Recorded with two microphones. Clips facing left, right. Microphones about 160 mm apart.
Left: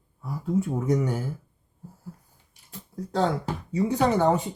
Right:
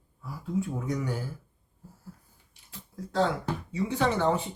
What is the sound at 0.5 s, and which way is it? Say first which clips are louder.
Speech: left 6 dB; 45° left (ahead or behind).